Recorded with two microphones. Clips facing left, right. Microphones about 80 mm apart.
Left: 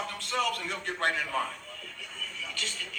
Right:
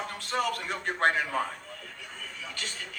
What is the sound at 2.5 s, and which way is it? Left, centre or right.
Speech, right.